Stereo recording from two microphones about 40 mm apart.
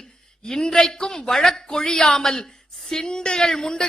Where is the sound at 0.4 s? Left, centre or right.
Centre.